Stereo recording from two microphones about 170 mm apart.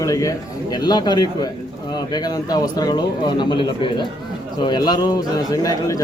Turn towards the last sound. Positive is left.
turn(degrees=20)  # may be behind; listen again after turning